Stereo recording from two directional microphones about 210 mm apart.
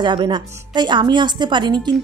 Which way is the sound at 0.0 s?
20° right (ahead or behind).